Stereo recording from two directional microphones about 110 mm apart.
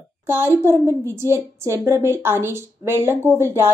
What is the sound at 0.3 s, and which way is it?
A woman's voice, 20° right (ahead or behind).